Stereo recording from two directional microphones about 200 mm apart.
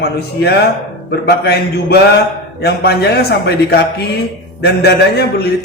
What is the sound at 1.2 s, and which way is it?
A man's voice, 55° left (ahead or behind).